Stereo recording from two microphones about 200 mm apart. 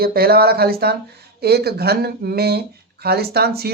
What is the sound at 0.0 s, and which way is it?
Speech, 50° right (ahead or behind).